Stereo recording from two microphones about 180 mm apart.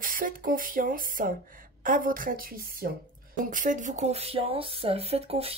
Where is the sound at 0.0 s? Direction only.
50° right (ahead or behind).